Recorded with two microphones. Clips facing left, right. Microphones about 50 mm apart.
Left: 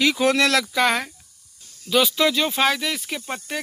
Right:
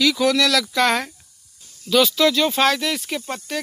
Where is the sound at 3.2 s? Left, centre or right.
Centre.